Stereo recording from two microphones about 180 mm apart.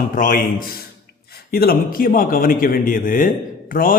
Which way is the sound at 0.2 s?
45° left (ahead or behind).